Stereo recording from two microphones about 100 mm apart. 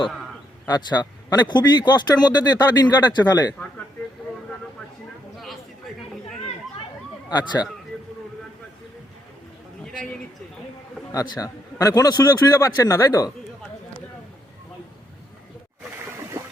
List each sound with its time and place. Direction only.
0.7 s speech: 45° left (ahead or behind)
7.3 s speech: 45° left (ahead or behind)
11.1 s a man's voice: 35° left (ahead or behind)